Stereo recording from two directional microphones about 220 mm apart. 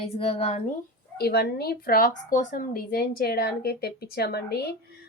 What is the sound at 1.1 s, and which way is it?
A woman's voice, 45° left (ahead or behind).